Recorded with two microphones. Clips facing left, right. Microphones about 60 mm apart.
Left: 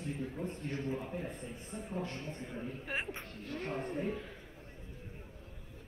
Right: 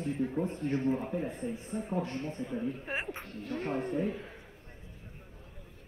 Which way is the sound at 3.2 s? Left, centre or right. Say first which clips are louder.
Right 5 dB; right.